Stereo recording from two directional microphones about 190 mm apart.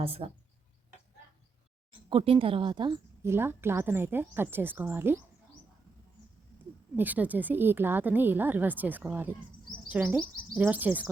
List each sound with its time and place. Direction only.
0.0 s speech: 30° right (ahead or behind)
1.9 s a woman's voice: 25° right (ahead or behind); by 5.1 s 10° right (ahead or behind)
6.9 s a woman's voice: 10° right (ahead or behind)